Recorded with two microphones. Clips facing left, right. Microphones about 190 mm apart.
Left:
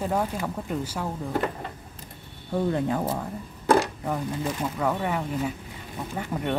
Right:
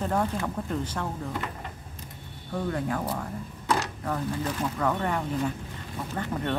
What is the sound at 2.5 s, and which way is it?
Speech, 25° left (ahead or behind).